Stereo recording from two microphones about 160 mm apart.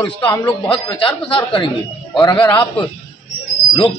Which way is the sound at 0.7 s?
30° left (ahead or behind).